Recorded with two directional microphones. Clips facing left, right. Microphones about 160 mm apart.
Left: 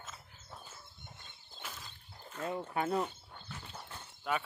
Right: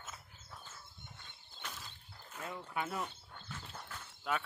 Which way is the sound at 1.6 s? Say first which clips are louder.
Left 1 dB; centre (ahead or behind).